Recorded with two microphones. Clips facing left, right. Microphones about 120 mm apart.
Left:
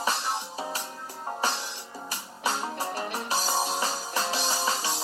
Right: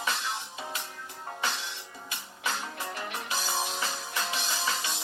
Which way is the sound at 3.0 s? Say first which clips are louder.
Left 4 dB; 35° left (ahead or behind).